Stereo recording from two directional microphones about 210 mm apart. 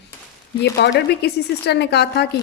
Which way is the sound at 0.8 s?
50° left (ahead or behind).